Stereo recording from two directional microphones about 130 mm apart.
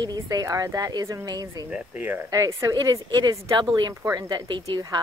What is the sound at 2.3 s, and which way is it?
Speech, 25° right (ahead or behind).